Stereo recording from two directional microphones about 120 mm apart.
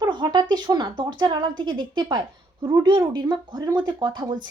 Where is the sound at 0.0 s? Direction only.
35° right (ahead or behind).